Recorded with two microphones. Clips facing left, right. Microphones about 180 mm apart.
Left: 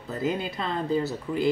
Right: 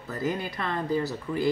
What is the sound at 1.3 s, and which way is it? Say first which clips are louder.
Speech: left 1 dB; 10° left (ahead or behind).